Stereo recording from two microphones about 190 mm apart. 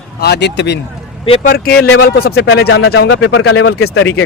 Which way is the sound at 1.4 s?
50° left (ahead or behind).